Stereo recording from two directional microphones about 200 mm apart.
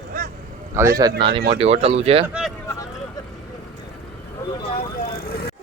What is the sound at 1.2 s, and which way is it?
Speech, 25° right (ahead or behind).